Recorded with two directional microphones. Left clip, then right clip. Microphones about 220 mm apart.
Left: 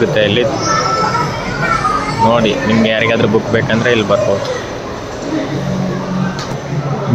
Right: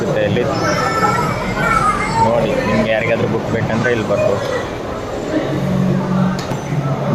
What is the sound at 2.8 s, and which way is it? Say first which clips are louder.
Speech: left 3 dB; 15° left (ahead or behind).